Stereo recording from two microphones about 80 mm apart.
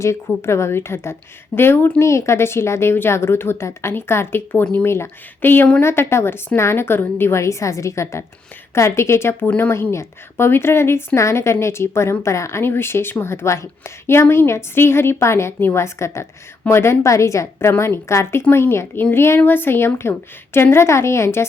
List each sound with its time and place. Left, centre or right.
0.3 s a woman's voice: left